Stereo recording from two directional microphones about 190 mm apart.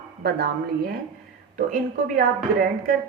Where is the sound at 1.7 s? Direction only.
45° right (ahead or behind).